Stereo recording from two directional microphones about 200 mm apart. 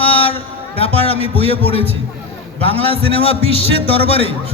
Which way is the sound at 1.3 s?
30° left (ahead or behind).